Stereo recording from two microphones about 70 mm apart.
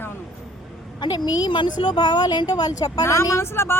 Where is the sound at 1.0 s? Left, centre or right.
Left.